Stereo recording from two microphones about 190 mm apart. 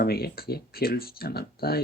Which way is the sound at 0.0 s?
55° left (ahead or behind).